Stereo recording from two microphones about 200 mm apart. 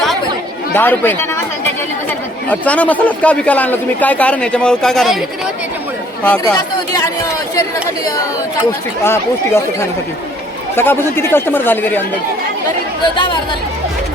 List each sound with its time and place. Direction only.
0.7 s speech: 10° left (ahead or behind)
2.5 s speech: 5° left (ahead or behind)
6.4 s speech: 20° left (ahead or behind)
9.0 s speech: 15° left (ahead or behind)
10.8 s speech: 10° left (ahead or behind)
13.1 s speech: 25° left (ahead or behind)